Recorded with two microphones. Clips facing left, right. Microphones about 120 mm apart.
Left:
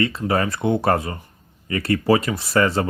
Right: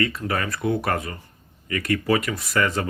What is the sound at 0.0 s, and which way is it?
Speech, 30° left (ahead or behind).